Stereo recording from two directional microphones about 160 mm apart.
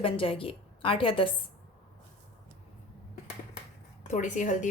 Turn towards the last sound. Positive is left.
turn(degrees=50)  # may be behind; listen again after turning